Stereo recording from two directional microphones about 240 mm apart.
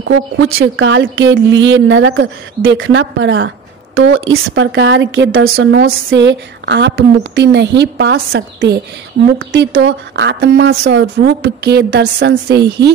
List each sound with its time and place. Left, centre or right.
0.1 s speech: right